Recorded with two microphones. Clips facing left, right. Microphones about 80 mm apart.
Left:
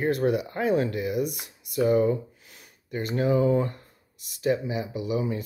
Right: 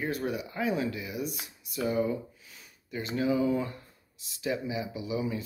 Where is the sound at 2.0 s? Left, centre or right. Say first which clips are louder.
Left 6 dB; left.